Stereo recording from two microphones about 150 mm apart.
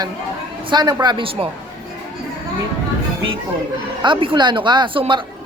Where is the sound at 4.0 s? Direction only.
35° right (ahead or behind).